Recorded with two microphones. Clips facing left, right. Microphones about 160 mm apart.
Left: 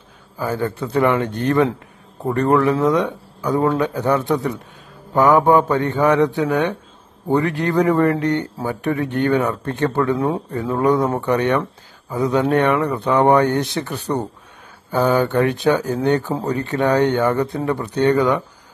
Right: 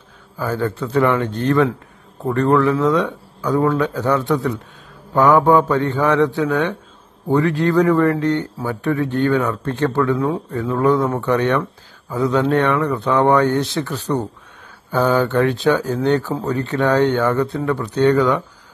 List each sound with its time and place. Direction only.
0.6 s a man's voice: 15° left (ahead or behind)
10.1 s speech: 30° left (ahead or behind)
10.8 s a man's voice: 15° left (ahead or behind)